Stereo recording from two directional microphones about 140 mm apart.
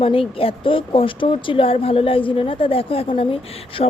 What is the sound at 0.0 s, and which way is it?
Speech, 40° left (ahead or behind).